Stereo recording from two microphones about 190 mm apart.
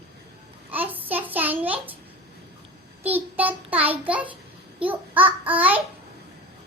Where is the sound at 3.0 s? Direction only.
10° right (ahead or behind).